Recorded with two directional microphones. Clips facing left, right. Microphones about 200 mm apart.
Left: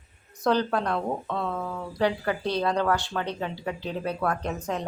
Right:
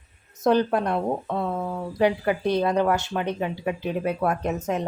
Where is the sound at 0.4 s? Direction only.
20° right (ahead or behind).